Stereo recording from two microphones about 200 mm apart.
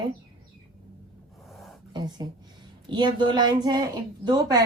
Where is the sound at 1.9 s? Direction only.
20° right (ahead or behind).